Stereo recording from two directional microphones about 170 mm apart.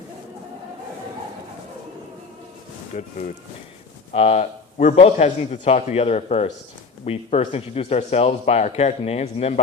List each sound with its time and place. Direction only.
2.9 s speech: 45° left (ahead or behind)
4.1 s speech: 40° left (ahead or behind)